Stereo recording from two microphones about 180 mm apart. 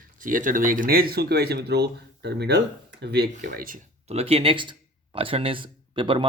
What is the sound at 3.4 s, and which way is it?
Speech, 50° right (ahead or behind).